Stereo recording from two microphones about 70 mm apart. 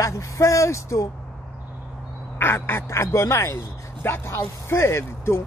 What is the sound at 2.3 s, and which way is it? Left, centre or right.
Speech, left.